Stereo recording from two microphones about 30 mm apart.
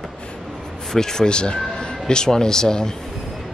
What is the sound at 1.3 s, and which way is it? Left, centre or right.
Speech, left.